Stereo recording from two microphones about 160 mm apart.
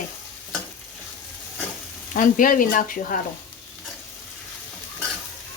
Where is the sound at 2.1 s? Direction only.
55° left (ahead or behind).